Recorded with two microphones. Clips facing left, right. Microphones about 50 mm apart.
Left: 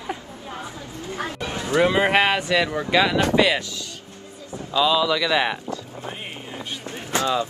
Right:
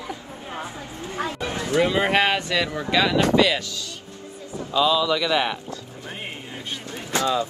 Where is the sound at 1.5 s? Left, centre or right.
Left.